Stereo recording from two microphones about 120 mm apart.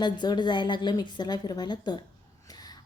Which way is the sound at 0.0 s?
40° left (ahead or behind).